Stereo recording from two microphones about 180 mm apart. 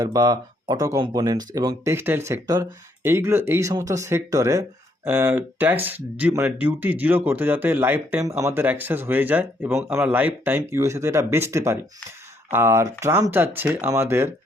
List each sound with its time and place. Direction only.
0.0 s speech: 20° right (ahead or behind)